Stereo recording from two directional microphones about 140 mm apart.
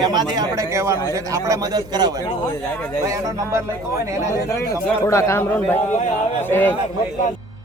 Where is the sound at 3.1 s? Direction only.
25° right (ahead or behind).